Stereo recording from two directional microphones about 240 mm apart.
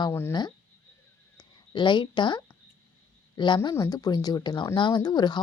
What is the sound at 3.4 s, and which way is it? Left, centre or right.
Speech, centre.